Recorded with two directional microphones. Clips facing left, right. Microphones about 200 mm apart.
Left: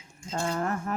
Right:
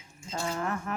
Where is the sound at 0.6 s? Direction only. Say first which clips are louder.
Left 3 dB; 40° left (ahead or behind).